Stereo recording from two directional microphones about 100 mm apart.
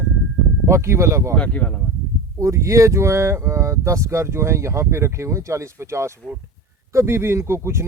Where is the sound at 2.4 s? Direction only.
30° right (ahead or behind).